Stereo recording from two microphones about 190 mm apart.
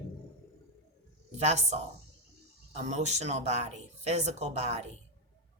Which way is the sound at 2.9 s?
35° right (ahead or behind).